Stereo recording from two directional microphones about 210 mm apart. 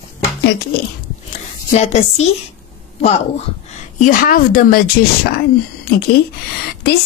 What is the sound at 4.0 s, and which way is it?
Speech, 40° left (ahead or behind).